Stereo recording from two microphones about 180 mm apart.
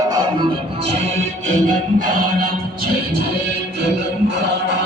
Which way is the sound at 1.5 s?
45° right (ahead or behind).